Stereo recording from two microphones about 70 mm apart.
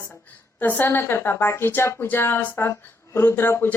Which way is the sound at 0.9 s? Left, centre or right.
Left.